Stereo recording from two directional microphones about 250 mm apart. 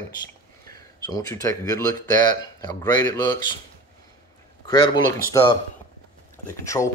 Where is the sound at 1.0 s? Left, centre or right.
Centre.